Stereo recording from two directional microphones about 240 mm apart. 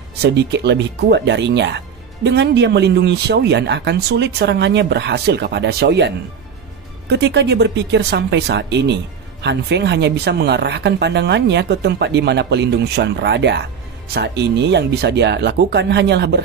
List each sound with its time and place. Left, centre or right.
0.2 s speech: right